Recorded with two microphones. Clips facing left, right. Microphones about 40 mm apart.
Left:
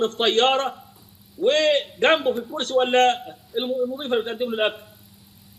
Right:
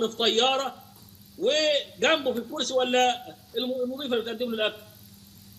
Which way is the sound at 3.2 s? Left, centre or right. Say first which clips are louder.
Left 4 dB; centre.